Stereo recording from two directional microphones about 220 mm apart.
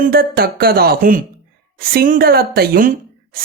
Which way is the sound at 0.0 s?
40° right (ahead or behind).